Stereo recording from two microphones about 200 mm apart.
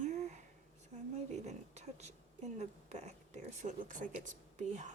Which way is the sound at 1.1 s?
35° right (ahead or behind).